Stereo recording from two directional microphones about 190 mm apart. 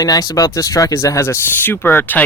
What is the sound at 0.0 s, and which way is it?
Speech, 20° left (ahead or behind).